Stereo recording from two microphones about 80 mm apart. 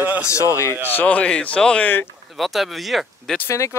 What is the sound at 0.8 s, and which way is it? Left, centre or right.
Speech, left.